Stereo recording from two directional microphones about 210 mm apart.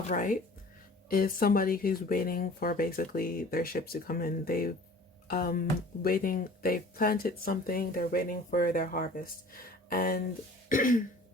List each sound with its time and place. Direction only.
0.1 s throat clearing: 40° left (ahead or behind)
1.0 s speech: 40° left (ahead or behind)
10.7 s throat clearing: 40° left (ahead or behind)